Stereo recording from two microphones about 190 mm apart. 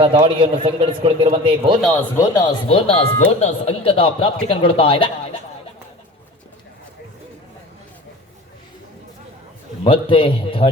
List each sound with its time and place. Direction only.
0.0 s a man's voice: 30° right (ahead or behind)
2.1 s speech: 15° left (ahead or behind)
2.6 s speech: 30° left (ahead or behind)
9.8 s speech: 30° left (ahead or behind)